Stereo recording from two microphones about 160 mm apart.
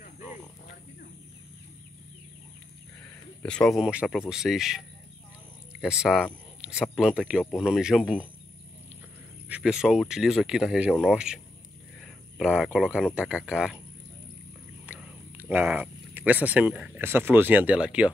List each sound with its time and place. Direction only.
3.4 s speech: 5° left (ahead or behind)
9.5 s speech: 5° right (ahead or behind)
14.9 s whispering: 5° right (ahead or behind)
15.5 s speech: 10° right (ahead or behind)